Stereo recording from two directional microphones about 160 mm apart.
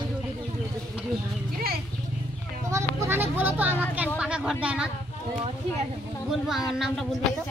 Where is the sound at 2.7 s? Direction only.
15° right (ahead or behind).